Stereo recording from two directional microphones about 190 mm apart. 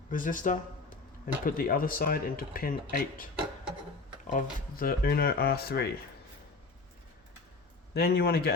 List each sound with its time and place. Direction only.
0.1 s speech: 45° left (ahead or behind)
4.3 s speech: 45° left (ahead or behind)
7.9 s a man's voice: 55° left (ahead or behind)